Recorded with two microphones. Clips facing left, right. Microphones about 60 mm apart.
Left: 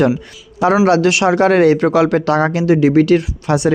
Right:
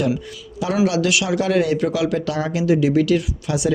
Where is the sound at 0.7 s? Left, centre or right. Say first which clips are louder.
Left 5 dB; left.